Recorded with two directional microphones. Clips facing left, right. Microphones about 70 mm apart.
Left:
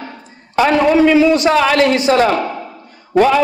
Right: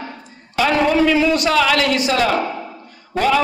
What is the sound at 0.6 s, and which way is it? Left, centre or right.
A man's voice, left.